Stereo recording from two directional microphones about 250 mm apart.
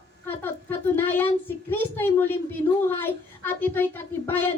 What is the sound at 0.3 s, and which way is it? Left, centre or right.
A child's voice, centre.